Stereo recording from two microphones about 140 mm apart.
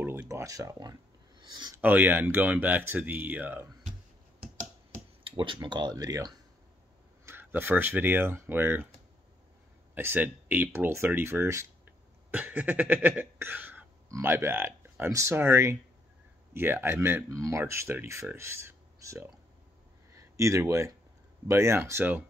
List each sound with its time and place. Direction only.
0.0 s speech: 15° right (ahead or behind); by 1.8 s 30° right (ahead or behind)
1.8 s speech: 15° right (ahead or behind)
5.2 s speech: 35° right (ahead or behind)
7.2 s speech: 15° right (ahead or behind)
9.9 s speech: 15° right (ahead or behind)